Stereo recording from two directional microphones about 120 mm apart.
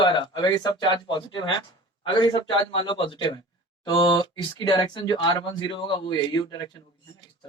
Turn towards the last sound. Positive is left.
turn(degrees=40)  # may be behind; listen again after turning